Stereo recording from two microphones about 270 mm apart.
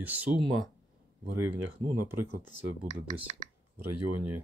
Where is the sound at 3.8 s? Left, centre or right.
Right.